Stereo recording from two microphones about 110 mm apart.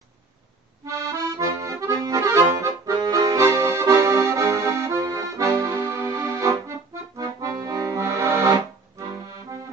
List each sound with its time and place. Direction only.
0.8 s accordion: 25° right (ahead or behind)